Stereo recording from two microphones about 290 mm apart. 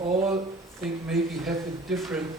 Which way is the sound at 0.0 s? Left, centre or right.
Right.